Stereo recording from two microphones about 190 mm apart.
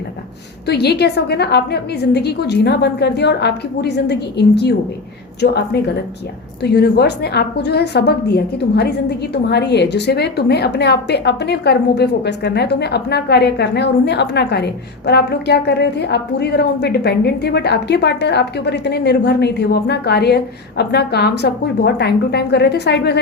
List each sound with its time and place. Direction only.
0.7 s a woman's voice: 60° left (ahead or behind)